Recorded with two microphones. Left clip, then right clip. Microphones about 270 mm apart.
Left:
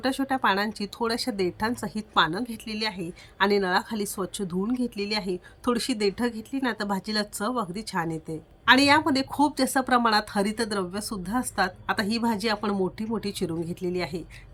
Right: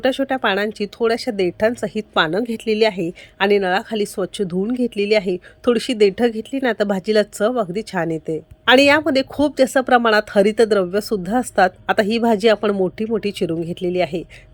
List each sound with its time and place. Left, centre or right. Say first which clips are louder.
0.0 s speech: right 7 dB; centre